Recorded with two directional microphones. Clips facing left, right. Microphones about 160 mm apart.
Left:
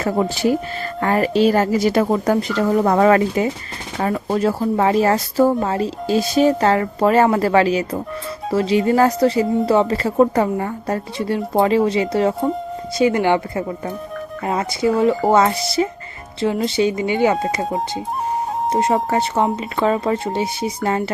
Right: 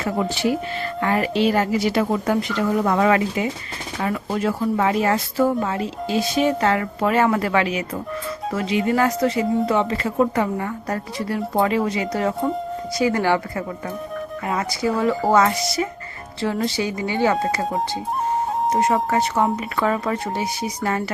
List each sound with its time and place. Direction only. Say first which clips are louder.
0.0 s speech: left 4 dB; 40° left (ahead or behind); by 17.3 s 20° left (ahead or behind)
18.7 s speech: left 2 dB; 30° left (ahead or behind)